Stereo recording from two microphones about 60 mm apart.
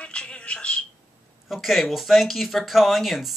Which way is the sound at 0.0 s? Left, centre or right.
Centre.